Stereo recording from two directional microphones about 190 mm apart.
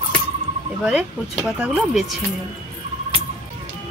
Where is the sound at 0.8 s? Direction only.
Centre (ahead or behind).